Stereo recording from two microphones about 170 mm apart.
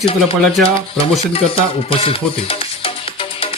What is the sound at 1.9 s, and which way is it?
Music, 35° left (ahead or behind).